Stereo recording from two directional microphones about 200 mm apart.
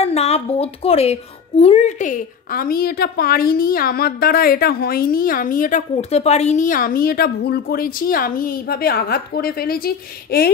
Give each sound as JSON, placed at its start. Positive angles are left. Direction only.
{"t": 0.0, "sound": "a woman's voice", "side_deg": 30}